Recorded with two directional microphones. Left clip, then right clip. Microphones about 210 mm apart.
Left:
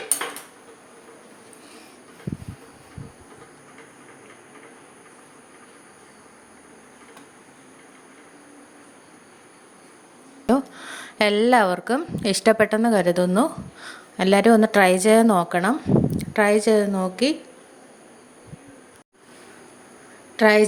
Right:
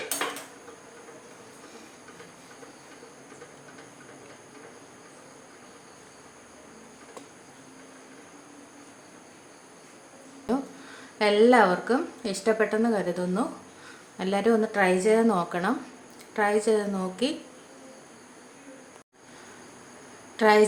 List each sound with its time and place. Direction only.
10.4 s a woman's voice: 40° left (ahead or behind)
20.3 s speech: 30° left (ahead or behind)